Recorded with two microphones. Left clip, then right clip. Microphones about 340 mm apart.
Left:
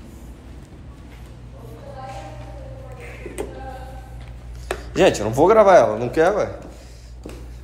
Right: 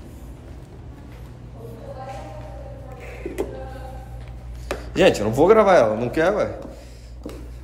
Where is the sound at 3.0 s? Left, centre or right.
Centre.